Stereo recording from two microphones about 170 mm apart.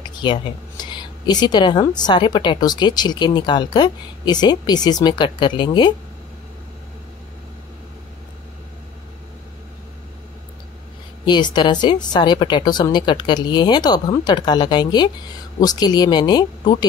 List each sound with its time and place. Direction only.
0.0 s a woman's voice: 25° left (ahead or behind)
11.2 s a woman's voice: 25° left (ahead or behind)